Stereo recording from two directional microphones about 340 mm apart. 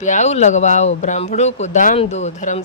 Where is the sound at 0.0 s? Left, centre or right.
Left.